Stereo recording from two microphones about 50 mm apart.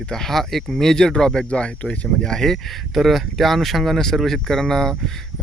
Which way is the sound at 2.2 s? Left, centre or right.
Centre.